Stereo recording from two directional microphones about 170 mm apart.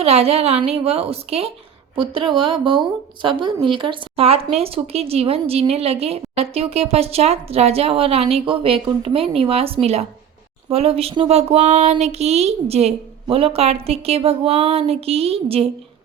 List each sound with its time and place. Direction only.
0.0 s a woman's voice: 35° right (ahead or behind)